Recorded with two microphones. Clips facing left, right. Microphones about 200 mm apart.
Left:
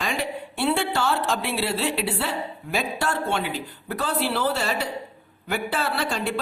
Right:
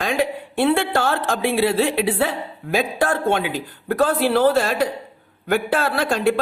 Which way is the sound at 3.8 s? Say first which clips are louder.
Right 8 dB; 50° right (ahead or behind).